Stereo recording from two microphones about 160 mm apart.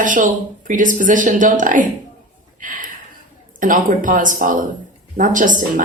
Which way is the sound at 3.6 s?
55° right (ahead or behind).